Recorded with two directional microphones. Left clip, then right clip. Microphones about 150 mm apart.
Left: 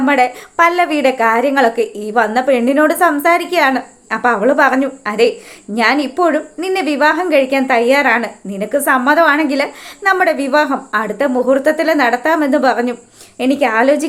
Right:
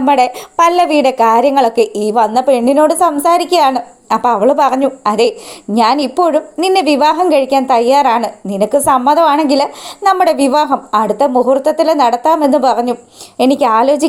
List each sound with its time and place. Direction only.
0.0 s a woman's voice: 35° right (ahead or behind)